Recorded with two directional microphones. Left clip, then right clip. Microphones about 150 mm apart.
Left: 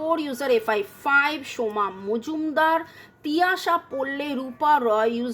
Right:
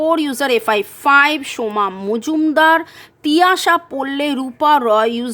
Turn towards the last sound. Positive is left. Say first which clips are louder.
# right 7 dB
turn(degrees=-50)  # may be behind; listen again after turning